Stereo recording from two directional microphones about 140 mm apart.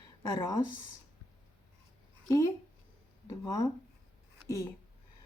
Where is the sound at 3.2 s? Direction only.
25° left (ahead or behind).